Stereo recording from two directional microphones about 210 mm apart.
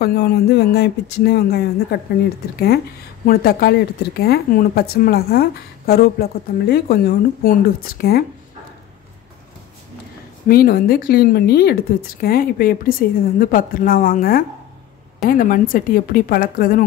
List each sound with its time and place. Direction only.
0.0 s speech: 50° left (ahead or behind)
3.3 s speech: 45° left (ahead or behind)
10.5 s speech: 45° left (ahead or behind)